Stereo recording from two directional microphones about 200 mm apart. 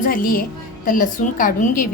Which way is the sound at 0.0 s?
45° left (ahead or behind).